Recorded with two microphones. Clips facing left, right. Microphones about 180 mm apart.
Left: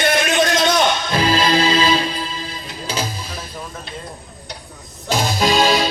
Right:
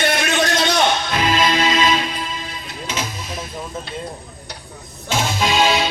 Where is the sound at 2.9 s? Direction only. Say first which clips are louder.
Left 2 dB; 35° left (ahead or behind).